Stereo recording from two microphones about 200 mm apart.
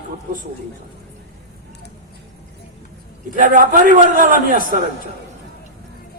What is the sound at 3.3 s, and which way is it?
A man's voice, 40° right (ahead or behind).